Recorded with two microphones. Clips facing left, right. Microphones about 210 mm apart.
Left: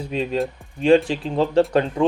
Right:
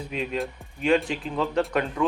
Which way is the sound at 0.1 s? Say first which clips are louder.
Left 6 dB; 30° left (ahead or behind).